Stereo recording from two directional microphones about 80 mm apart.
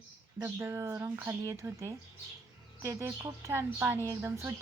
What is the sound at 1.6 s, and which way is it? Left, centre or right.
Speech, right.